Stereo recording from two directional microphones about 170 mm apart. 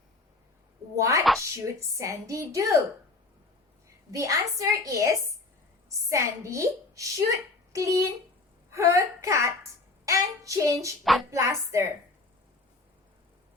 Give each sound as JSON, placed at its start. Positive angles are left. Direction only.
{"t": 0.9, "sound": "speech", "side_deg": -20}
{"t": 3.8, "sound": "a woman's voice", "side_deg": -20}
{"t": 10.1, "sound": "child singing", "side_deg": -20}
{"t": 11.0, "sound": "a woman's voice", "side_deg": 0}
{"t": 11.3, "sound": "speech", "side_deg": -15}